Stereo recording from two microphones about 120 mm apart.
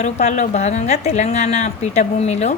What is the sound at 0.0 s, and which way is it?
A woman's voice, 75° left (ahead or behind).